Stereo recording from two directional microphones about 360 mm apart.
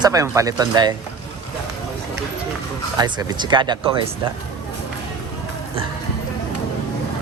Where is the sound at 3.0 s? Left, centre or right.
Centre.